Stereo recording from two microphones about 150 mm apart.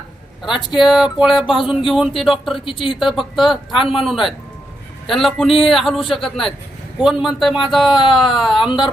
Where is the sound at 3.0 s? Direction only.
Centre (ahead or behind).